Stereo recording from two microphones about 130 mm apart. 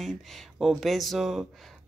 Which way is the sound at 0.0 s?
Centre (ahead or behind).